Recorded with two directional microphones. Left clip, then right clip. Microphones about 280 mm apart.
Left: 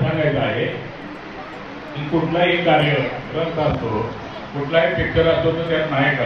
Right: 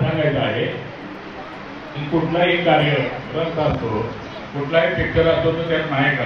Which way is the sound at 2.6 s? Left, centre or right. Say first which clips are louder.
Even; centre.